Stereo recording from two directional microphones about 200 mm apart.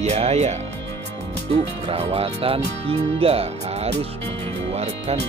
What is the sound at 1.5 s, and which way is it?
Speech, 25° right (ahead or behind).